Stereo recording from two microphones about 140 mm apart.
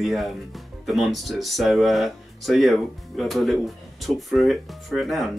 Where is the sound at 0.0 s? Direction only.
Centre (ahead or behind).